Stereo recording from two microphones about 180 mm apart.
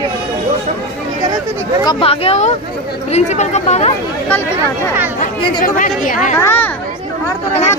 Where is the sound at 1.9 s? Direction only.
30° left (ahead or behind).